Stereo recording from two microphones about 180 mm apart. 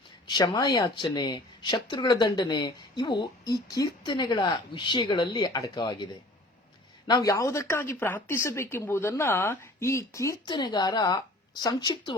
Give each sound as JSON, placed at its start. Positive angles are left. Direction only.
{"t": 0.3, "sound": "speech", "side_deg": 20}
{"t": 7.1, "sound": "speech", "side_deg": 20}